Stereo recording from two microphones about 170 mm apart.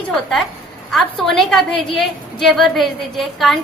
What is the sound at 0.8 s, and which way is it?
A woman's voice, centre (ahead or behind).